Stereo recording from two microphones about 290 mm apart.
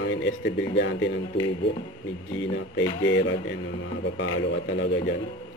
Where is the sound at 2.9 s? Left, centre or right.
Left.